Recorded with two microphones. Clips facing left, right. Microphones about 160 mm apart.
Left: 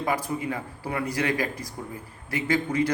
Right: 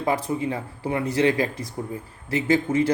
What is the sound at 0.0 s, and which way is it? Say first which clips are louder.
A man's voice: right 3 dB; 25° right (ahead or behind).